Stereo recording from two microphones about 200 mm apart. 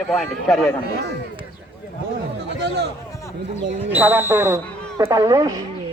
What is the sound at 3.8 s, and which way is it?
A man's voice, 10° right (ahead or behind).